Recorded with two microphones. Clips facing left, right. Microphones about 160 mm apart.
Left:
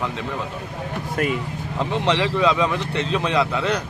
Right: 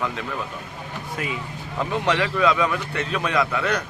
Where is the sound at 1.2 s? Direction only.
55° left (ahead or behind).